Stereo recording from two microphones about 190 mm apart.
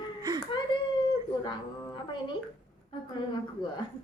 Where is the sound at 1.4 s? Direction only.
25° left (ahead or behind).